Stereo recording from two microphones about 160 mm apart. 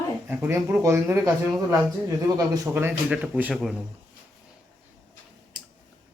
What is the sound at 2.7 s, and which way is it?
Speech, 10° right (ahead or behind).